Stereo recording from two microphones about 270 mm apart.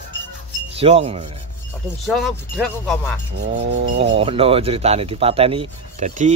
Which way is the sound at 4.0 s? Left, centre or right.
Right.